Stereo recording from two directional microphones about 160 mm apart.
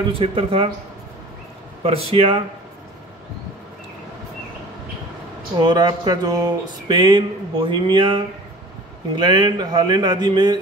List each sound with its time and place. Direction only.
0.1 s speech: 35° right (ahead or behind)
1.8 s speech: 40° right (ahead or behind)
5.6 s speech: 25° right (ahead or behind)